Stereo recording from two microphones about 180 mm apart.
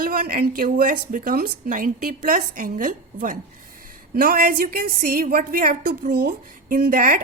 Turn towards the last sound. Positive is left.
turn(degrees=-50)  # may be behind; listen again after turning